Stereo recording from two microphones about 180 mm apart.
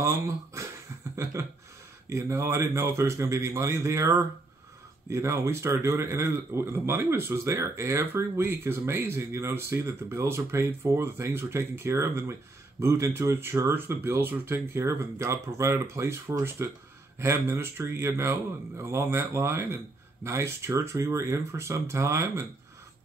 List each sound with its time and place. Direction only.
0.0 s speech: 15° right (ahead or behind)
1.1 s a sound: 15° right (ahead or behind)
2.0 s speech: 15° right (ahead or behind)